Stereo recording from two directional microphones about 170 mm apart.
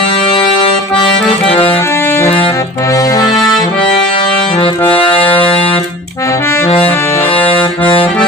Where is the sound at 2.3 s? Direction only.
30° left (ahead or behind).